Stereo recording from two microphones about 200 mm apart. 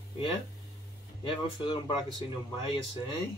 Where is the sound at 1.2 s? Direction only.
25° left (ahead or behind).